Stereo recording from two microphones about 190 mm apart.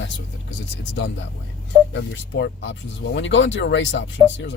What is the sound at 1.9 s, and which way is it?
Speech, 65° left (ahead or behind).